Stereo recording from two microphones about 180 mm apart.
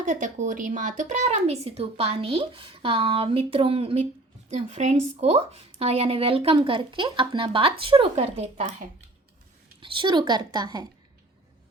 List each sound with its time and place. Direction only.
0.0 s speech: 45° right (ahead or behind)
9.8 s a woman's voice: 30° right (ahead or behind)